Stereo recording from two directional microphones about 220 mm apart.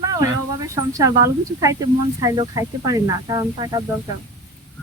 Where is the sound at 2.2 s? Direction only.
15° right (ahead or behind).